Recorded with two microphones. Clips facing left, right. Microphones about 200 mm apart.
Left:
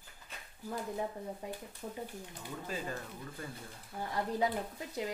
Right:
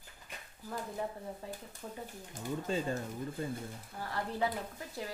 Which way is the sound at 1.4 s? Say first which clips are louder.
Left 2 dB; 15° left (ahead or behind).